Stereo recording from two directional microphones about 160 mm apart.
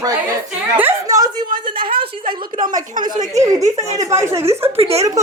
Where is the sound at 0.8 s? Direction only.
15° right (ahead or behind).